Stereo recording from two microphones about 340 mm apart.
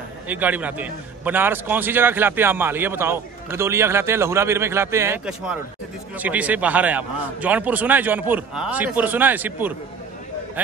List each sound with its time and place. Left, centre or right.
0.3 s a man's voice: centre